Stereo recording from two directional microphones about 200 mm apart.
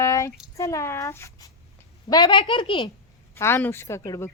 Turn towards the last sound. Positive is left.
turn(degrees=15)  # may be behind; listen again after turning